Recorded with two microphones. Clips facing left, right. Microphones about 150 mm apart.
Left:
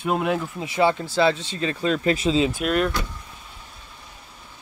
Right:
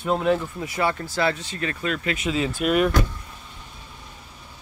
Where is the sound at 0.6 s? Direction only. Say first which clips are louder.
Left 4 dB; 25° left (ahead or behind).